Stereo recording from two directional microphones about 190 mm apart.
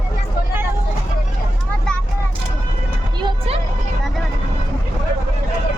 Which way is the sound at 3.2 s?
25° right (ahead or behind).